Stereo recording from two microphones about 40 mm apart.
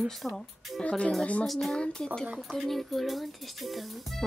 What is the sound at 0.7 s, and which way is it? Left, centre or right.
Speech, left.